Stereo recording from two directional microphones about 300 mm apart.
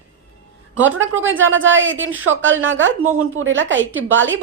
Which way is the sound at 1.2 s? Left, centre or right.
Right.